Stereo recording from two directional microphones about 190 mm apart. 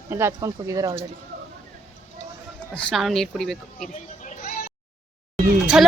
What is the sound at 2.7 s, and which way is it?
A woman's voice, centre (ahead or behind).